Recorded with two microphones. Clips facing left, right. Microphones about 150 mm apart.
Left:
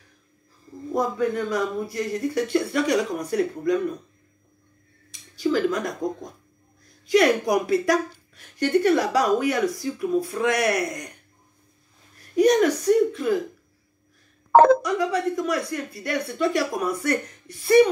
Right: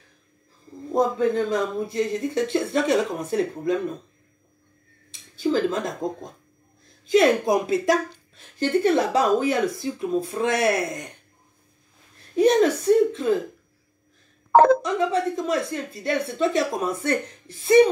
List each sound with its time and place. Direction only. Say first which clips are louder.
0.9 s a woman's voice: right 3 dB; 25° right (ahead or behind)
5.1 s a woman's voice: even; 25° right (ahead or behind)
12.4 s a woman's voice: even; 25° right (ahead or behind)
14.8 s a woman's voice: right 1 dB; 25° right (ahead or behind)